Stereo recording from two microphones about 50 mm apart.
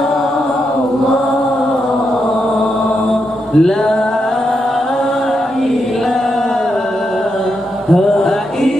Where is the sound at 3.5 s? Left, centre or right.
Centre.